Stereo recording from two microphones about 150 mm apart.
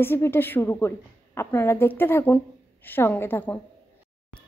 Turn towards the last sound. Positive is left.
turn(degrees=15)  # may be behind; listen again after turning